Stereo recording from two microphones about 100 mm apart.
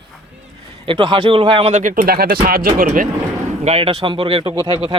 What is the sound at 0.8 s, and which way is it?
Speech, 55° right (ahead or behind).